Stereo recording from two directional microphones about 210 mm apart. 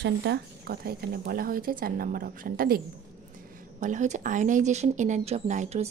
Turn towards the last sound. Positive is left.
turn(degrees=-35)  # may be behind; listen again after turning